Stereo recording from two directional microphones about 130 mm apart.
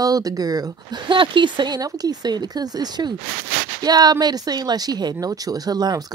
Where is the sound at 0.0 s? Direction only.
30° right (ahead or behind).